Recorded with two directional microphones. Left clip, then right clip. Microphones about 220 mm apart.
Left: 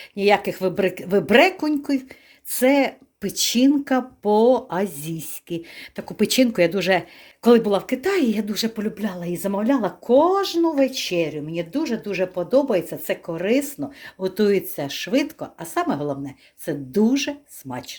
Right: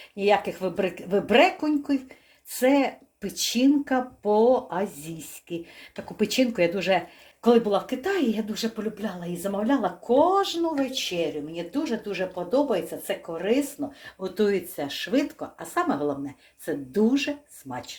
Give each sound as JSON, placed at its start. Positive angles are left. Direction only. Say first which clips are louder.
{"t": 0.2, "sound": "speech", "louder": "left 4 dB", "side_deg": 35}